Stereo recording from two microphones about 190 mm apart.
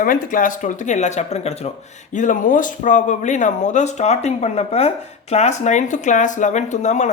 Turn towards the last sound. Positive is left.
turn(degrees=40)  # may be behind; listen again after turning